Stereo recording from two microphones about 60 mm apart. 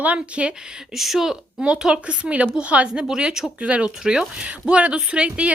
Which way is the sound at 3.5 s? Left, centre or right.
Right.